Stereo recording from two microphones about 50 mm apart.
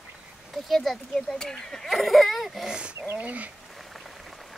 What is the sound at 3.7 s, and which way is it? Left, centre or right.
Frying, centre.